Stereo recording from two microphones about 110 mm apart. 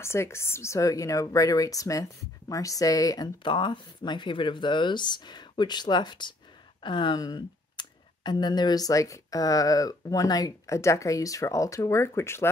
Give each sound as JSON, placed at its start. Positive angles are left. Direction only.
{"t": 0.0, "sound": "a woman's voice", "side_deg": 25}